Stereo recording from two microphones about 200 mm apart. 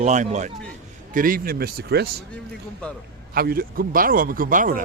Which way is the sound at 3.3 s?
50° right (ahead or behind).